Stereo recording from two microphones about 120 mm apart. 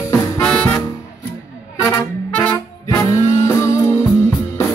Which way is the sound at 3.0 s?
25° left (ahead or behind).